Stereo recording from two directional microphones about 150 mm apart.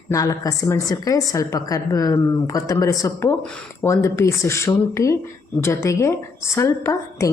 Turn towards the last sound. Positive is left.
turn(degrees=20)  # may be behind; listen again after turning